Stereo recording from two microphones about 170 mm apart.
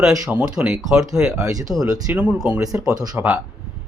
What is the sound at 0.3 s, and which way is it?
Speech, 10° right (ahead or behind).